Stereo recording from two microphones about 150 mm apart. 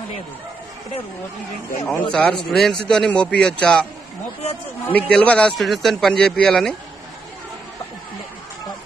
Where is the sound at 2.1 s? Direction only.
5° left (ahead or behind).